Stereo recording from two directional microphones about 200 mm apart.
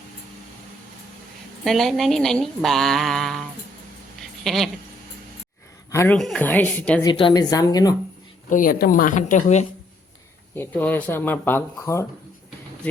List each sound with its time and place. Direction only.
1.6 s speech: centre (ahead or behind)
4.4 s speech: centre (ahead or behind)
5.9 s speech: 15° left (ahead or behind)
6.1 s speech: 5° left (ahead or behind)
7.0 s a woman's voice: 25° left (ahead or behind)
8.4 s speech: 45° left (ahead or behind)
10.5 s speech: 10° left (ahead or behind)